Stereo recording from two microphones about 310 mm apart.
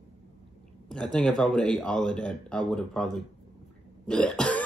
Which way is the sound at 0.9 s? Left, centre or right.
Centre.